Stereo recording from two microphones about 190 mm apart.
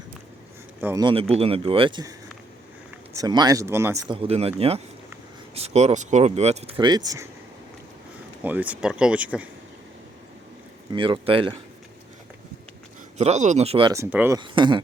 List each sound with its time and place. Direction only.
0.8 s speech: 10° right (ahead or behind)
1.3 s speech: 30° right (ahead or behind); by 4.0 s 15° right (ahead or behind)
4.1 s speech: 30° right (ahead or behind)
8.4 s speech: 10° right (ahead or behind)
10.9 s speech: 25° right (ahead or behind)
13.1 s speech: 35° right (ahead or behind)
13.9 s speech: 10° right (ahead or behind)
14.3 s speech: 25° right (ahead or behind)